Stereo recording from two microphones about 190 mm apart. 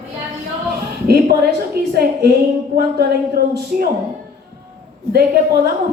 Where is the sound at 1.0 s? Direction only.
55° right (ahead or behind).